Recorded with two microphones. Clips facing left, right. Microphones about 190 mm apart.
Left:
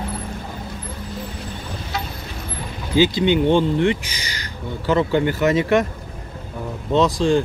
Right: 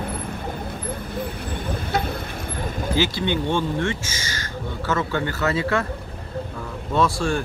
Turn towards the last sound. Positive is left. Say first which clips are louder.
# left 5 dB
turn(degrees=20)  # may be behind; listen again after turning